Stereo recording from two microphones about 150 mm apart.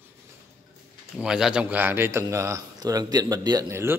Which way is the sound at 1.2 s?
5° right (ahead or behind).